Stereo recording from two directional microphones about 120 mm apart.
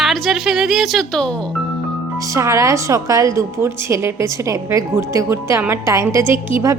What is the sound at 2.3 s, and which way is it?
A woman's voice, 25° right (ahead or behind).